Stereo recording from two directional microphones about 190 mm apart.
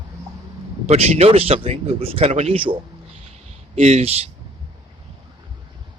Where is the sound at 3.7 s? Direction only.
35° right (ahead or behind).